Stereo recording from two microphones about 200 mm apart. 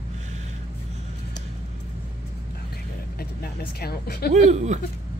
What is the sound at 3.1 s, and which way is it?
Vehicle, 50° left (ahead or behind).